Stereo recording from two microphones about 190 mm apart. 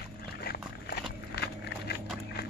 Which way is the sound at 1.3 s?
60° left (ahead or behind).